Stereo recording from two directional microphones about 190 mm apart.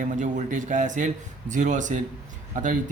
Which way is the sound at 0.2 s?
40° right (ahead or behind).